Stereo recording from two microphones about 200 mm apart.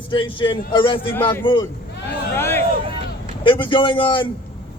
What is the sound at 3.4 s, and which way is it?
Speech, 25° left (ahead or behind).